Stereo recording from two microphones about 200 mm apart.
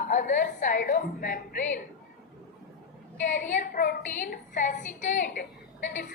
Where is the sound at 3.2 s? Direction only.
40° left (ahead or behind).